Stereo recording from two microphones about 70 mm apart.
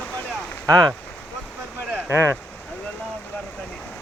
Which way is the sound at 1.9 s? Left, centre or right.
Right.